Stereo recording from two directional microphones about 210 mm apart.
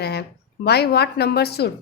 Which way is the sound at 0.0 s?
50° left (ahead or behind).